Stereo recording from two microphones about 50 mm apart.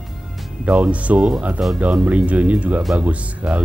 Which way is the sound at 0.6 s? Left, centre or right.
Right.